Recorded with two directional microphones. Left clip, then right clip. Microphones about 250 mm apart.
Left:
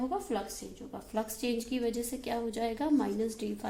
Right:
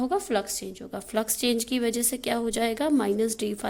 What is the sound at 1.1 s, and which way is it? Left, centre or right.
A woman's voice, right.